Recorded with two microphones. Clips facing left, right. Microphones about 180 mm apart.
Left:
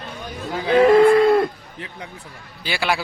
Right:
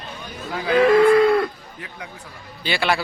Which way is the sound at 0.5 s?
30° left (ahead or behind).